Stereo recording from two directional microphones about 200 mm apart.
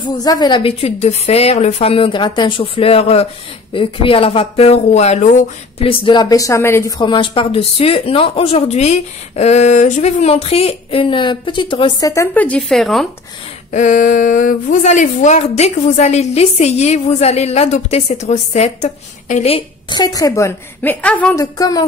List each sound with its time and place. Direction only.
0.0 s speech: 20° left (ahead or behind); by 13.0 s centre (ahead or behind)
13.7 s a woman's voice: 40° left (ahead or behind); by 21.5 s 5° left (ahead or behind)
21.5 s speech: 20° left (ahead or behind)